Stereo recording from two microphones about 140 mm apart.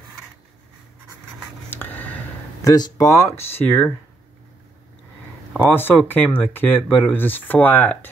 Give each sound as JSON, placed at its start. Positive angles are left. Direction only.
{"t": 1.7, "sound": "a sound", "side_deg": 15}
{"t": 2.6, "sound": "speech", "side_deg": 25}
{"t": 5.7, "sound": "speech", "side_deg": 15}